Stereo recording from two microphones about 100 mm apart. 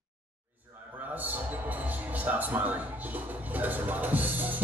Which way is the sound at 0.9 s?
15° right (ahead or behind).